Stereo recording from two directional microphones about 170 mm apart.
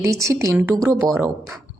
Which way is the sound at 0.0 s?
20° right (ahead or behind).